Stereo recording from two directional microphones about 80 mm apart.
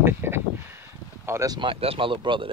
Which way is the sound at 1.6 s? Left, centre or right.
Right.